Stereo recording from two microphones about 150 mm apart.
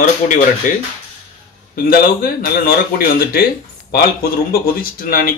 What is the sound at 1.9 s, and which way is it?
Speech, 80° left.